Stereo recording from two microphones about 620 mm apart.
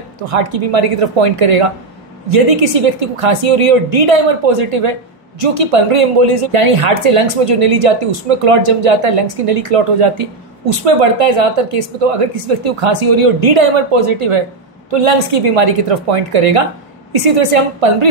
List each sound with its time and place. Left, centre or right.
0.2 s speech: right